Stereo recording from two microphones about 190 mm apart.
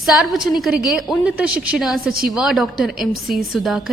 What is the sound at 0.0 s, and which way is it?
A woman's voice, centre (ahead or behind).